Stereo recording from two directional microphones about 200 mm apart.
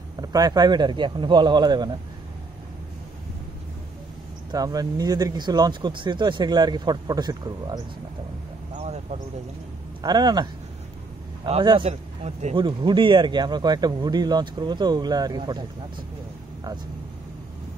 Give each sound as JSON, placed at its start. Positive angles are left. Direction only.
{"t": 0.2, "sound": "speech", "side_deg": -20}
{"t": 4.5, "sound": "speech", "side_deg": -20}
{"t": 8.7, "sound": "a sound", "side_deg": -35}
{"t": 10.0, "sound": "speech", "side_deg": -20}
{"t": 12.5, "sound": "speech", "side_deg": -25}